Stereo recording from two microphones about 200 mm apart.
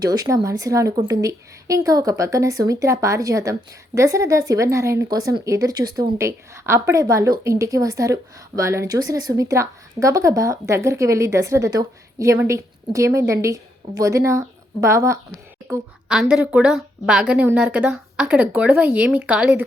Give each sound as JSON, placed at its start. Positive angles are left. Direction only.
{"t": 0.0, "sound": "a woman's voice", "side_deg": -20}
{"t": 15.6, "sound": "a woman's voice", "side_deg": -5}